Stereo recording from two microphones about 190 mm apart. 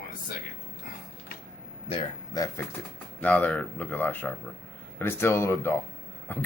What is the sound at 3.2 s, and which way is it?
Speech, 10° left (ahead or behind).